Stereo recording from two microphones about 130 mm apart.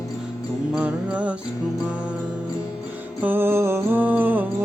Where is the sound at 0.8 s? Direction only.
10° right (ahead or behind).